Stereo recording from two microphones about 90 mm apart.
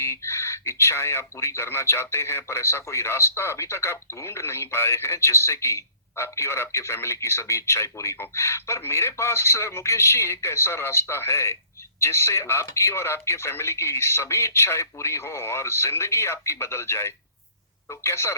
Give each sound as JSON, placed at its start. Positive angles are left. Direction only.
{"t": 0.0, "sound": "speech", "side_deg": 30}